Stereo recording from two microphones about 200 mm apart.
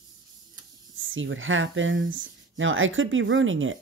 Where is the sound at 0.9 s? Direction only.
75° right (ahead or behind).